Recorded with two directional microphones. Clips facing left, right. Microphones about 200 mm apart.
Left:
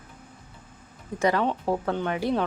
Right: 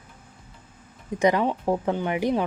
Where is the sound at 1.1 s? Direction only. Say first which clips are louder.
Right 2 dB; 15° right (ahead or behind).